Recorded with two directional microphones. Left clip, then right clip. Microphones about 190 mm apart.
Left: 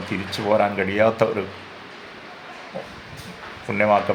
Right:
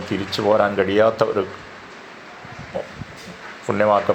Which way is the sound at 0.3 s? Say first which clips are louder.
Right 2 dB; 15° right (ahead or behind).